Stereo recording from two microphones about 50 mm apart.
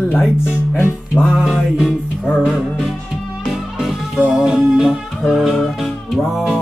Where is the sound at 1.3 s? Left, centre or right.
Centre.